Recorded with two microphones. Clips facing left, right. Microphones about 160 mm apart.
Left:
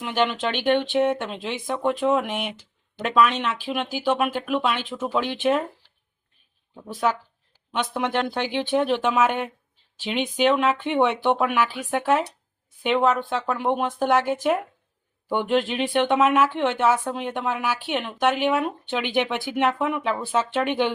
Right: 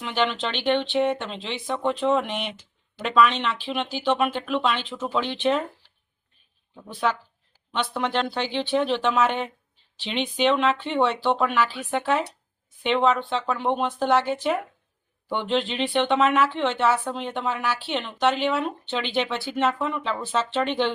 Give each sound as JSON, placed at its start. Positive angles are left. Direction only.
{"t": 0.0, "sound": "speech", "side_deg": 10}
{"t": 6.8, "sound": "speech", "side_deg": 10}